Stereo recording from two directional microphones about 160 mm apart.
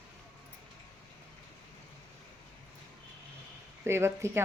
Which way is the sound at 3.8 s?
15° right (ahead or behind).